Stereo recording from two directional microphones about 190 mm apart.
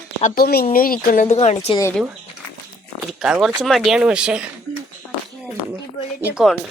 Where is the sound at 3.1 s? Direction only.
5° right (ahead or behind).